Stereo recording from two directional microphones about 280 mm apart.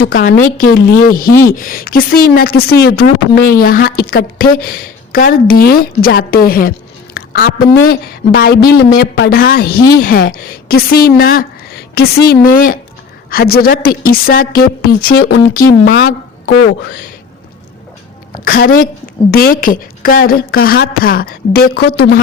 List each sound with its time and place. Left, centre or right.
0.5 s a woman's voice: left
18.4 s speech: left